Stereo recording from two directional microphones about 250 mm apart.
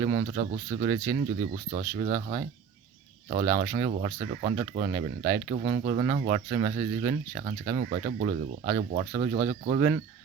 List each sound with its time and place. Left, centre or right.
0.0 s speech: right